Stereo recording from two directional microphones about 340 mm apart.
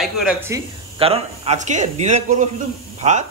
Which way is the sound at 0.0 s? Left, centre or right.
Centre.